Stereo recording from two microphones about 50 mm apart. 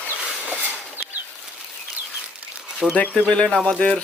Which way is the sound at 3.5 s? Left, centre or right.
Centre.